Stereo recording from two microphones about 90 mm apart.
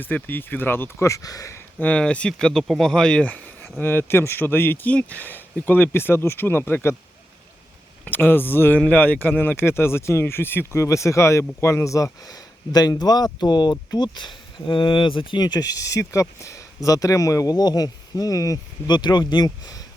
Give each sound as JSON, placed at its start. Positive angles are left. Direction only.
{"t": 0.0, "sound": "speech", "side_deg": 20}
{"t": 1.8, "sound": "speech", "side_deg": 10}
{"t": 8.0, "sound": "speech", "side_deg": 25}
{"t": 15.4, "sound": "speech", "side_deg": 50}
{"t": 18.9, "sound": "speech", "side_deg": 55}